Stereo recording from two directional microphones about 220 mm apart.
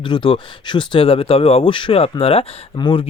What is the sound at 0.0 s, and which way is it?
Speech, 20° left (ahead or behind).